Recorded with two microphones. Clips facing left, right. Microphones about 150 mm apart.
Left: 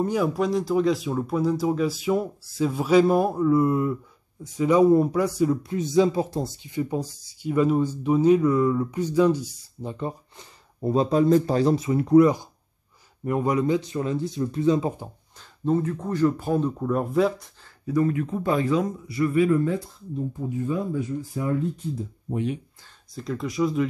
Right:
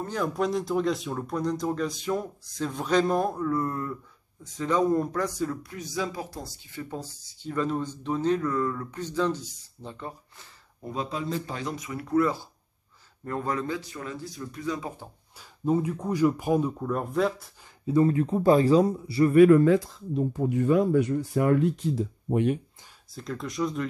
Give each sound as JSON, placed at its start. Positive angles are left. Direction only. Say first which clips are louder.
{"t": 0.0, "sound": "speech", "louder": "left 5 dB", "side_deg": 10}
{"t": 5.6, "sound": "speech", "louder": "left 12 dB", "side_deg": 25}
{"t": 10.9, "sound": "speech", "louder": "left 12 dB", "side_deg": 40}
{"t": 15.6, "sound": "speech", "louder": "left 2 dB", "side_deg": -10}
{"t": 16.8, "sound": "speech", "louder": "left 4 dB", "side_deg": 5}
{"t": 17.8, "sound": "speech", "louder": "right 1 dB", "side_deg": -30}
{"t": 19.3, "sound": "speech", "louder": "right 6 dB", "side_deg": -65}
{"t": 23.1, "sound": "speech", "louder": "left 5 dB", "side_deg": 0}